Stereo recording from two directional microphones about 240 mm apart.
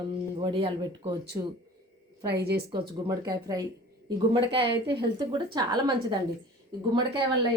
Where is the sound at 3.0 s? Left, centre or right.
Centre.